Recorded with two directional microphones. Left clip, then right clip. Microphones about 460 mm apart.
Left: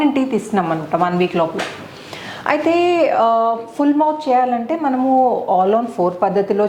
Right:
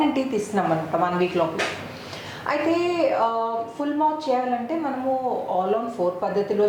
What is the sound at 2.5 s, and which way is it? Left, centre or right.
A woman's voice, left.